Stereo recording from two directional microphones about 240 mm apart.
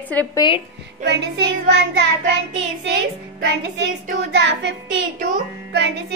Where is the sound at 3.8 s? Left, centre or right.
Right.